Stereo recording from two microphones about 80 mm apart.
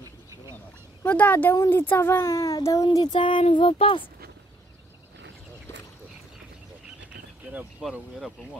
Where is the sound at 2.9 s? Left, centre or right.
Left.